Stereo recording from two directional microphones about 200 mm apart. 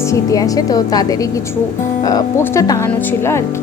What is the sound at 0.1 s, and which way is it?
Speech, 15° left (ahead or behind).